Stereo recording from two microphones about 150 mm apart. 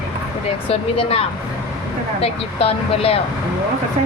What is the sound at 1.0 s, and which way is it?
Speech, 40° left (ahead or behind).